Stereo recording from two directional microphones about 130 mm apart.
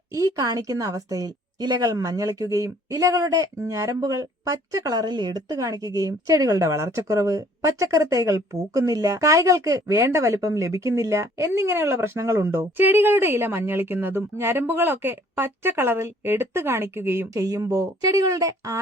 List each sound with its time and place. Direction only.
0.1 s a woman's voice: 25° right (ahead or behind)